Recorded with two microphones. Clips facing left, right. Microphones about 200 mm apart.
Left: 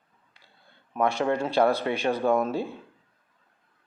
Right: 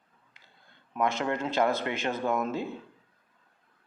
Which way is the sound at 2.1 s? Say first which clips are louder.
Left 5 dB; 30° left (ahead or behind).